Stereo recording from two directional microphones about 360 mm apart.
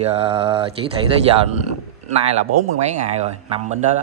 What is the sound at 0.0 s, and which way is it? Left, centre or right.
Speech, centre.